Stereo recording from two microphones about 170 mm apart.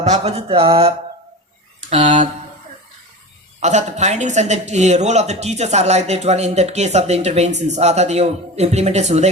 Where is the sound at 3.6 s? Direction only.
45° right (ahead or behind).